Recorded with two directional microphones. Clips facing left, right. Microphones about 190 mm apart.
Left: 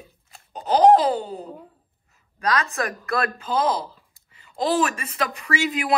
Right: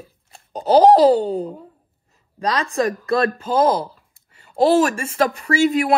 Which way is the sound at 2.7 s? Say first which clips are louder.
Right 7 dB; 30° right (ahead or behind).